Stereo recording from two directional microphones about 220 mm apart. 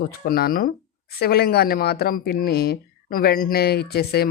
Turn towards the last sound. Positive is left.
turn(degrees=45)  # may be behind; listen again after turning